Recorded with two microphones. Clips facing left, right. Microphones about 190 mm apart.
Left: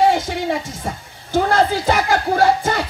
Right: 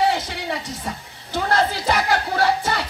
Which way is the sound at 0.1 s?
45° left (ahead or behind).